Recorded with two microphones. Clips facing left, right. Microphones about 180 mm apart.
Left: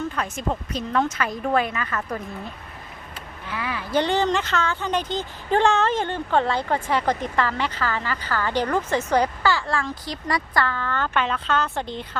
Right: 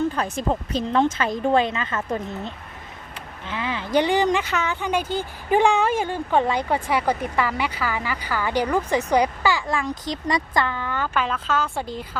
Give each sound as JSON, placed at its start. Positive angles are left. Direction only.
{"t": 0.2, "sound": "speech", "side_deg": -30}